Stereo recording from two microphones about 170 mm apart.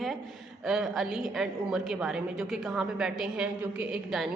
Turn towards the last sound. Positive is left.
turn(degrees=-5)  # may be behind; listen again after turning